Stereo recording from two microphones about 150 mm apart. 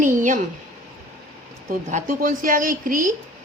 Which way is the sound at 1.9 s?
65° right (ahead or behind).